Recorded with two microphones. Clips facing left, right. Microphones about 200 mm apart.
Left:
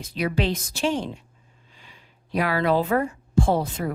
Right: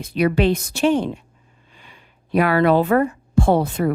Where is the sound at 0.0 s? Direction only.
65° right (ahead or behind).